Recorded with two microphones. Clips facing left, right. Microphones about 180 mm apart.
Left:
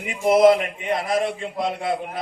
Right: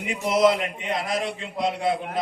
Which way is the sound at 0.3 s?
55° left (ahead or behind).